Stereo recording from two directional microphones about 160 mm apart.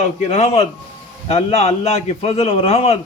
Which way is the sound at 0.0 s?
45° left (ahead or behind).